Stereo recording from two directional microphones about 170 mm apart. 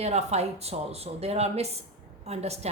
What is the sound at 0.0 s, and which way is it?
A woman's voice, 40° right (ahead or behind).